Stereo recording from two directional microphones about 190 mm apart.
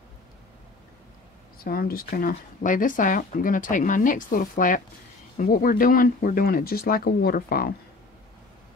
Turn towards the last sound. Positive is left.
turn(degrees=50)  # may be behind; listen again after turning